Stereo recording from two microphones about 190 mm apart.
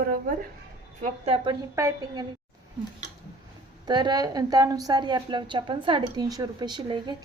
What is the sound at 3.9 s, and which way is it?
A woman's voice, 20° right (ahead or behind).